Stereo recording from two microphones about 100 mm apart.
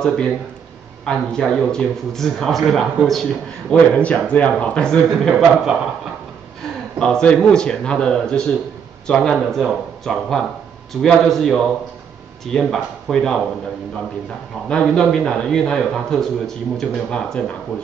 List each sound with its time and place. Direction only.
0.0 s a man's voice: 5° left (ahead or behind)
3.7 s a man's voice: 15° left (ahead or behind)
7.0 s a man's voice: 10° left (ahead or behind)
14.7 s a man's voice: 10° left (ahead or behind)